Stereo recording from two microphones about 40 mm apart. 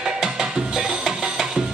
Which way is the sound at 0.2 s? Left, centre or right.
Centre.